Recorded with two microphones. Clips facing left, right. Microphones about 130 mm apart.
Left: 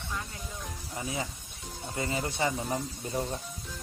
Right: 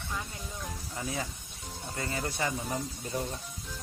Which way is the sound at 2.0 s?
20° left (ahead or behind).